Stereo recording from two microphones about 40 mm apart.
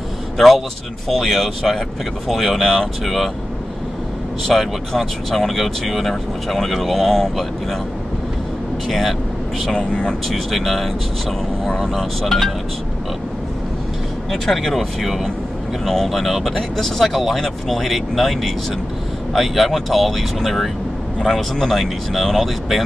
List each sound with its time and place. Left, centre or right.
1.0 s speech: centre
4.6 s speech: centre
8.8 s speech: centre
9.8 s speech: left
10.2 s speech: centre
14.3 s speech: centre